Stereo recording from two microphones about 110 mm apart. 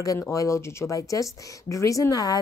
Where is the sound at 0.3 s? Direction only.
30° left (ahead or behind).